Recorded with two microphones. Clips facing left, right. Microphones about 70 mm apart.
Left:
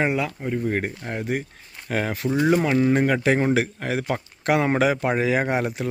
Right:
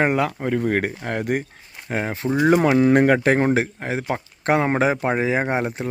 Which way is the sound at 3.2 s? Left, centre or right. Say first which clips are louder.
Right 2 dB; right.